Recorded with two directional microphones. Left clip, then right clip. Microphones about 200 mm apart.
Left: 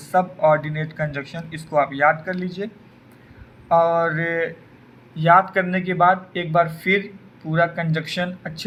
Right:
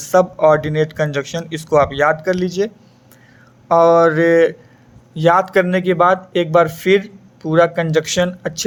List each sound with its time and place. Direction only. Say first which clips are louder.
0.0 s speech: right 6 dB; 60° right (ahead or behind)
3.7 s speech: right 6 dB; 60° right (ahead or behind)